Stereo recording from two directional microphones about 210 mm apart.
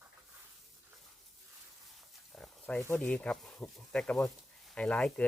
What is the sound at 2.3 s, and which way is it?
Speech, 5° left (ahead or behind).